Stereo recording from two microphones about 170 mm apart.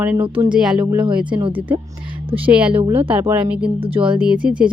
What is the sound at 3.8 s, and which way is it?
Speech, 35° right (ahead or behind).